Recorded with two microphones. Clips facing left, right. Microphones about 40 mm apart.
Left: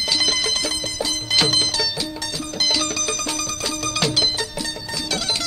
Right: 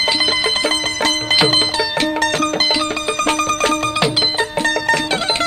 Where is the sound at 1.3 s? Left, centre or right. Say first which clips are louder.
Right 2 dB; right.